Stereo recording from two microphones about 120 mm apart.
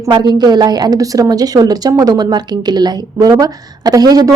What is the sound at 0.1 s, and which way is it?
A woman's voice, 35° right (ahead or behind).